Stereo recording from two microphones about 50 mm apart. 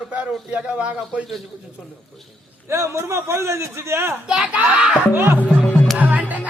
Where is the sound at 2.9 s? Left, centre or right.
Right.